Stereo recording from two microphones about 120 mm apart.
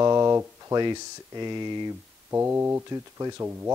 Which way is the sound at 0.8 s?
35° right (ahead or behind).